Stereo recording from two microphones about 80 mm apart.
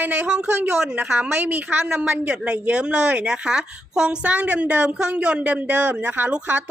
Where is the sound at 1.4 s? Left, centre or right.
Centre.